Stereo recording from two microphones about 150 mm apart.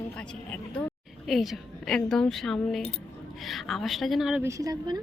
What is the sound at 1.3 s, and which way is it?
A woman's voice, centre (ahead or behind).